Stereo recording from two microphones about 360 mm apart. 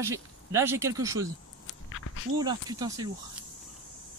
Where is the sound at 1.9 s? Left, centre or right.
Left.